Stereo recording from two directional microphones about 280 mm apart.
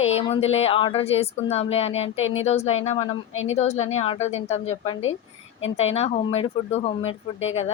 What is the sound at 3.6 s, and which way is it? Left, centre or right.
A woman's voice, left.